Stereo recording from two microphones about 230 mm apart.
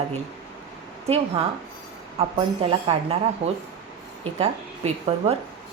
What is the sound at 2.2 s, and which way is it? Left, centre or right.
A woman's voice, right.